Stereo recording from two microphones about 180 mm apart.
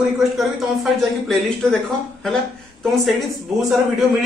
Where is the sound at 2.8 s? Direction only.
Centre (ahead or behind).